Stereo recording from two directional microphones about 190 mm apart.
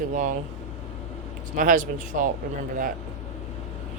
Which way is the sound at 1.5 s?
45° right (ahead or behind).